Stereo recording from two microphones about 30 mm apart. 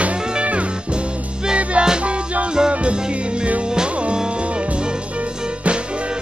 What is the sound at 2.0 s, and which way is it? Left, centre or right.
Music, right.